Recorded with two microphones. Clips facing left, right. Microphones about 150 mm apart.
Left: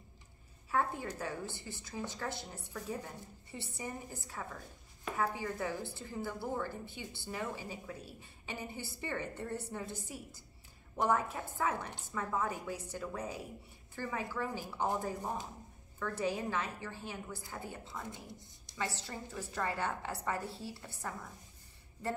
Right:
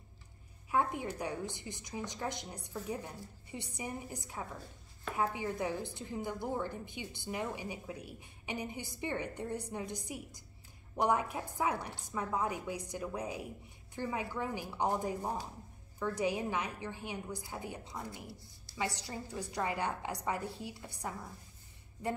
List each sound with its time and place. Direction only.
0.7 s a woman's voice: 15° right (ahead or behind)
18.0 s speech: 20° left (ahead or behind)
18.8 s a woman's voice: 15° right (ahead or behind)